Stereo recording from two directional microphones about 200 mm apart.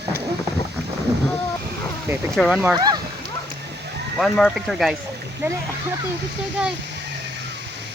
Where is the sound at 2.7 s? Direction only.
20° right (ahead or behind).